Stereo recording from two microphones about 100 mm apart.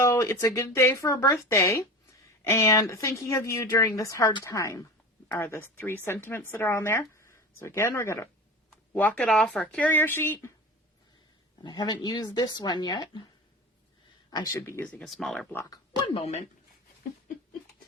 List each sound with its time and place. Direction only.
0.0 s speech: 30° left (ahead or behind)
5.4 s speech: 20° left (ahead or behind)
8.9 s speech: 15° left (ahead or behind)
9.2 s speech: 5° left (ahead or behind); by 10.5 s 25° left (ahead or behind)
11.6 s speech: 45° left (ahead or behind)
14.3 s speech: 45° left (ahead or behind)
14.6 s speech: 20° left (ahead or behind)
15.0 s speech: centre (ahead or behind)
16.0 s speech: 60° left (ahead or behind); by 16.5 s 80° left